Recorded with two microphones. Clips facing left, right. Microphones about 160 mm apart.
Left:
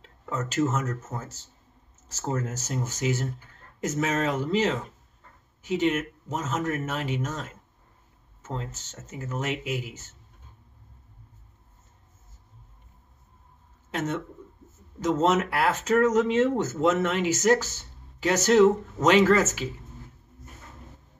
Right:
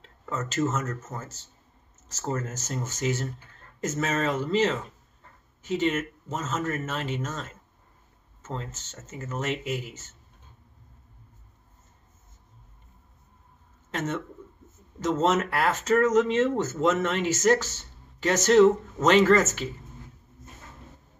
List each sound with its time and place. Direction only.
0.0 s speech: 10° left (ahead or behind)
13.8 s a man's voice: 10° left (ahead or behind)